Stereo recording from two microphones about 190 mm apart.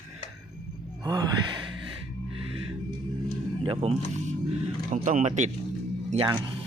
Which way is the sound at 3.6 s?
30° right (ahead or behind).